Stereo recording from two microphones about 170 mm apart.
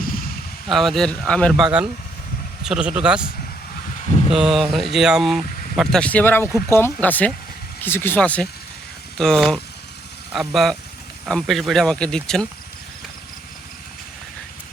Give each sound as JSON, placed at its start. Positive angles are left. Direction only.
{"t": 0.7, "sound": "speech", "side_deg": 0}
{"t": 4.3, "sound": "speech", "side_deg": -5}